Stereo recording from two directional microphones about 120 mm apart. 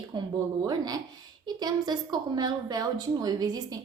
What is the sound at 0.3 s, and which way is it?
A woman's voice, 30° right (ahead or behind).